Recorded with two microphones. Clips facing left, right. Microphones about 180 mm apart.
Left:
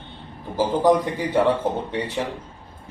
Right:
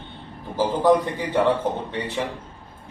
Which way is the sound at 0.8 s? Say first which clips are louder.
Right 1 dB; 10° left (ahead or behind).